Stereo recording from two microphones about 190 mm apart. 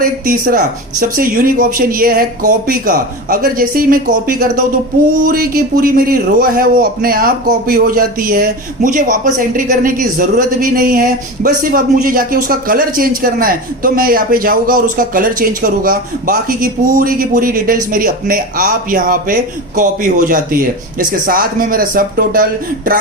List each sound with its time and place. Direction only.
0.0 s a man's voice: 50° right (ahead or behind)